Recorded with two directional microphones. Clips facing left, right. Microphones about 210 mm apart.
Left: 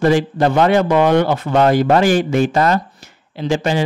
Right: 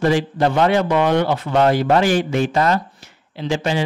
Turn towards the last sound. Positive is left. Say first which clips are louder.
# left 3 dB
turn(degrees=45)  # may be behind; listen again after turning